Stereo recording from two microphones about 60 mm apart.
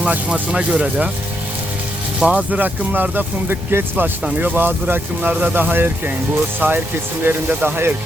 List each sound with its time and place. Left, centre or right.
0.0 s speech: right
2.2 s speech: right